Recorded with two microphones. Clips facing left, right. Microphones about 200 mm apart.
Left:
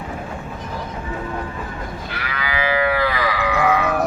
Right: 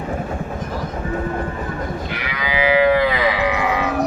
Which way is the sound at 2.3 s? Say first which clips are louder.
Right 4 dB; 15° right (ahead or behind).